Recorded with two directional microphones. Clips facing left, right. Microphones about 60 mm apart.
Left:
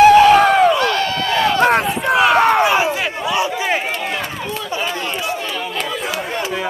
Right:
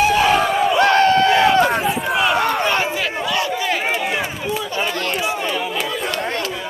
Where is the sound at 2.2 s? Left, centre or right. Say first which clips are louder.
Left 6 dB; left.